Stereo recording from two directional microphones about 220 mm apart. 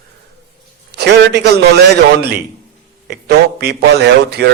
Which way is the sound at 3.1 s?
45° right (ahead or behind).